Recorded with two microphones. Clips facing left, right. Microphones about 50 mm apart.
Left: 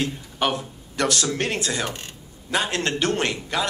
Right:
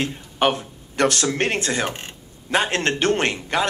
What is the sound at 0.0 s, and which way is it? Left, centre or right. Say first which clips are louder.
A man's voice: right 3 dB; right.